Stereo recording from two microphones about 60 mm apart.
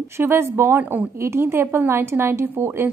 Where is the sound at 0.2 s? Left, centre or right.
Right.